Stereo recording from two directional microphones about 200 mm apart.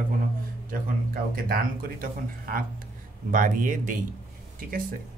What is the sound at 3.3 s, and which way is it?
Speech, 40° right (ahead or behind).